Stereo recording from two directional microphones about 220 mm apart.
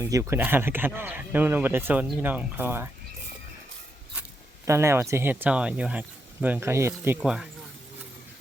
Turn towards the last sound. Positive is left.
turn(degrees=-5)  # may be behind; listen again after turning